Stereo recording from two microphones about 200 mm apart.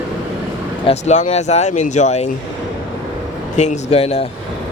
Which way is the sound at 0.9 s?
35° left (ahead or behind).